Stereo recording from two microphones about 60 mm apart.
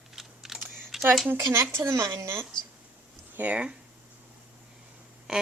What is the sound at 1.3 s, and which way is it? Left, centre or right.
Speech, right.